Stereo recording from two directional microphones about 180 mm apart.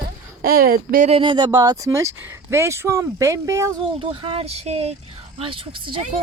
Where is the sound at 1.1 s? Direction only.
25° right (ahead or behind).